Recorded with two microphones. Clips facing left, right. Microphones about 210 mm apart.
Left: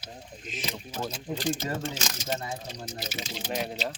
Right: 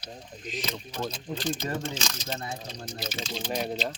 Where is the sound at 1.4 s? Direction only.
45° left (ahead or behind).